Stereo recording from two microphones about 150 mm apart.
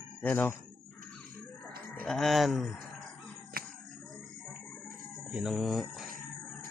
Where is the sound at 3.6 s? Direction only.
80° right.